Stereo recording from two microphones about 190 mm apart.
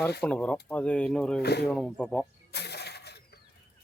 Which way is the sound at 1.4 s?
60° left (ahead or behind).